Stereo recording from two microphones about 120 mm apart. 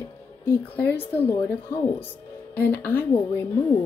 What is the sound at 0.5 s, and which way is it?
Speech, 15° left (ahead or behind).